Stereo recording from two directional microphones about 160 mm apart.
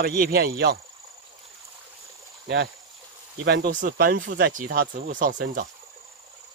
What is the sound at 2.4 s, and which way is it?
Speech, 90° right.